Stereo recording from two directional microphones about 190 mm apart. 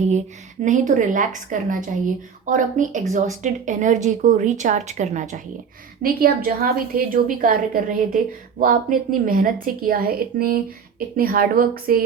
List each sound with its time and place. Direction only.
0.6 s a woman's voice: 40° right (ahead or behind)
6.0 s a woman's voice: 50° right (ahead or behind)